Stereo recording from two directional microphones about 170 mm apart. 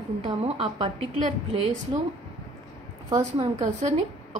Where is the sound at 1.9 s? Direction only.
25° right (ahead or behind).